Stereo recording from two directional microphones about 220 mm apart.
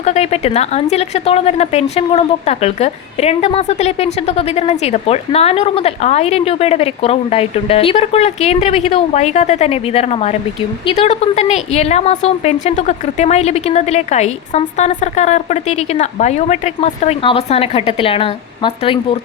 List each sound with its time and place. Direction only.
0.0 s a woman's voice: 30° left (ahead or behind)